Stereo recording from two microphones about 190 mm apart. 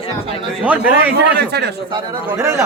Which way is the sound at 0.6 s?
10° right (ahead or behind).